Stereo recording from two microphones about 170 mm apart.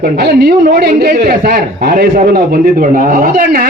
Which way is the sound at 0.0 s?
70° right (ahead or behind).